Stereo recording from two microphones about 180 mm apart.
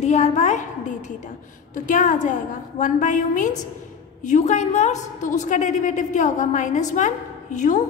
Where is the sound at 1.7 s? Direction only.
45° left (ahead or behind).